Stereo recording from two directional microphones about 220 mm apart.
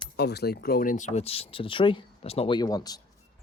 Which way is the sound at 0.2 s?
45° left (ahead or behind).